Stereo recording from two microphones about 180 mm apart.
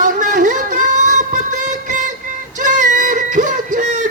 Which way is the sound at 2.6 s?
45° right (ahead or behind).